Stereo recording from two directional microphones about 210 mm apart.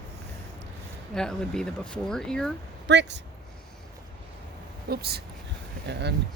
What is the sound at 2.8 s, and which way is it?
Speech, 55° right (ahead or behind).